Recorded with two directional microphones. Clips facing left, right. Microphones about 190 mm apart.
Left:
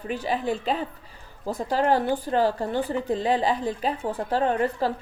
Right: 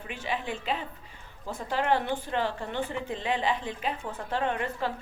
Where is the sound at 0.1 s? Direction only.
40° left (ahead or behind).